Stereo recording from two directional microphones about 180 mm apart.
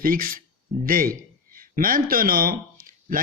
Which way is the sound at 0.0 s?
50° right (ahead or behind).